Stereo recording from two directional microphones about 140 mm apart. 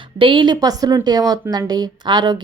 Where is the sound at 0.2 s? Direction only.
35° right (ahead or behind).